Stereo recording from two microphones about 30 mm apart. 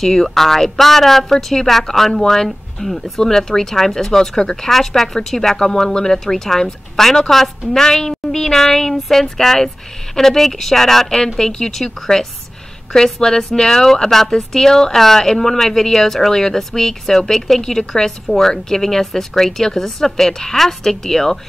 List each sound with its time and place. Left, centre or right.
0.0 s a woman's voice: centre
18.2 s speech: centre